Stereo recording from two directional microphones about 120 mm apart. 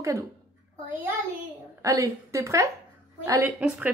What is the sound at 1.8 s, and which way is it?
Speech, 25° right (ahead or behind).